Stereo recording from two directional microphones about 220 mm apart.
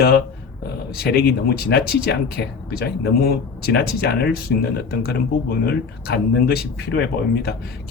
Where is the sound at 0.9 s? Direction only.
45° left (ahead or behind).